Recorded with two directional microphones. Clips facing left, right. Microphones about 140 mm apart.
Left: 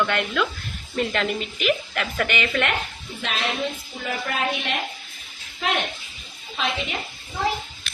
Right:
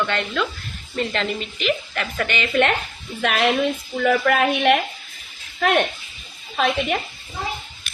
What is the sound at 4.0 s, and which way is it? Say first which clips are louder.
Speech: right 9 dB; 70° right (ahead or behind).